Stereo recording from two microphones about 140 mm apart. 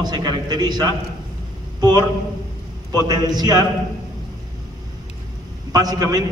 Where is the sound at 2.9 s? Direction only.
30° right (ahead or behind).